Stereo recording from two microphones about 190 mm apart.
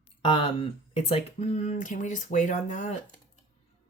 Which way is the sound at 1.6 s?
40° left (ahead or behind).